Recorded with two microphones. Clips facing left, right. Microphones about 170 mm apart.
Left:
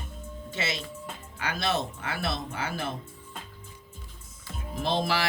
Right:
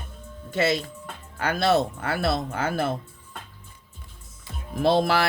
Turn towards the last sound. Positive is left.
turn(degrees=-50)  # may be behind; listen again after turning